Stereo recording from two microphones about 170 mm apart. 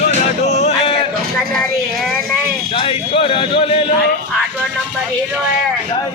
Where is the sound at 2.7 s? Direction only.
35° left (ahead or behind).